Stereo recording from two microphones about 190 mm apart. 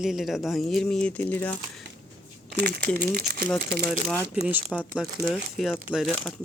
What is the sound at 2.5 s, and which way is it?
Speech, 50° right (ahead or behind).